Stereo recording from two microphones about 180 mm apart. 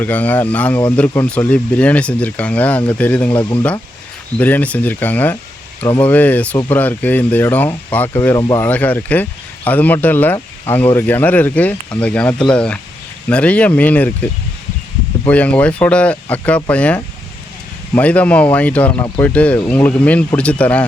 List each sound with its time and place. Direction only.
0.0 s speech: 10° left (ahead or behind)
8.6 s speech: 10° left (ahead or behind)
15.3 s speech: 10° left (ahead or behind)